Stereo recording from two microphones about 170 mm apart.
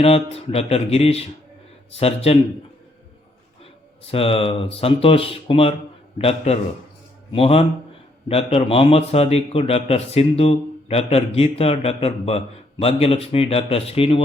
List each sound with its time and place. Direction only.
0.0 s a man's voice: 35° left (ahead or behind)
4.1 s a man's voice: 35° left (ahead or behind)